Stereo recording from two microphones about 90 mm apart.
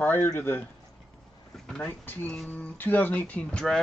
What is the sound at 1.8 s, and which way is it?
Speech, 20° left (ahead or behind).